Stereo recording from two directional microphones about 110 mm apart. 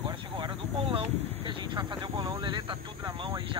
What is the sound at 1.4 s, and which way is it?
Vehicle, 45° right (ahead or behind).